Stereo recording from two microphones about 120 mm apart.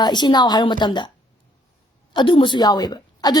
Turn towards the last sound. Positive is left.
turn(degrees=35)  # may be behind; listen again after turning